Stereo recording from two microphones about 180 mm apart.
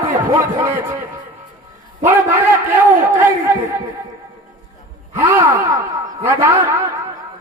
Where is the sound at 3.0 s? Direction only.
15° right (ahead or behind).